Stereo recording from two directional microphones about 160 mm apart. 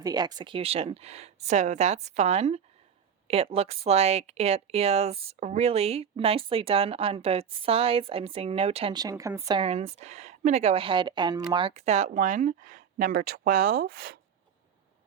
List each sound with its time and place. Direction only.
0.0 s speech: 25° right (ahead or behind)
9.6 s speech: 40° right (ahead or behind); by 14.2 s 70° right (ahead or behind)